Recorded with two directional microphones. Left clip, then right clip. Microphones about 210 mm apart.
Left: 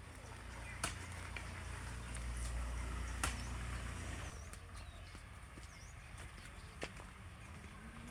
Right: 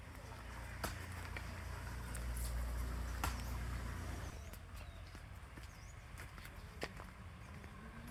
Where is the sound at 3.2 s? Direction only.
60° left (ahead or behind).